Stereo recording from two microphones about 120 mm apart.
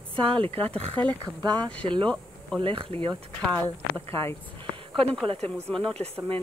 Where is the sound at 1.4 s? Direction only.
35° right (ahead or behind).